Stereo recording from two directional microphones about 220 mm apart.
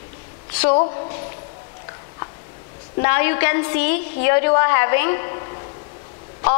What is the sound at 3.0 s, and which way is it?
A woman's voice, 15° left (ahead or behind).